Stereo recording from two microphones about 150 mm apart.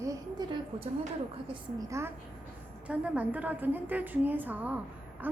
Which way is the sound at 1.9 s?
15° right (ahead or behind).